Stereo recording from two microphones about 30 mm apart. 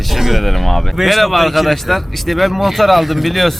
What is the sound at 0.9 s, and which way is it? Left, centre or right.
Speech, centre.